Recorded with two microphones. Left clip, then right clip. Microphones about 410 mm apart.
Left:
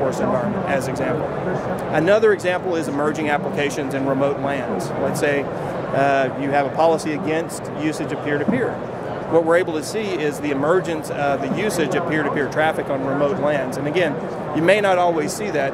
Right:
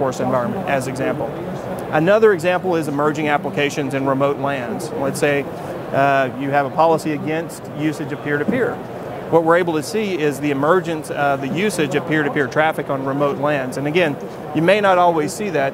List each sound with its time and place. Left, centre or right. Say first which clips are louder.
0.7 s speech: right 1 dB; right
5.9 s speech: right 2 dB; right